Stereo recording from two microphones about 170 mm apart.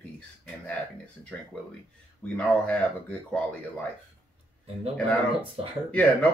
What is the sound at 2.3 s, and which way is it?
Speech, 5° left (ahead or behind).